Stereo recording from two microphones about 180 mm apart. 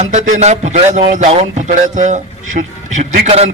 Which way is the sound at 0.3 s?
40° right (ahead or behind).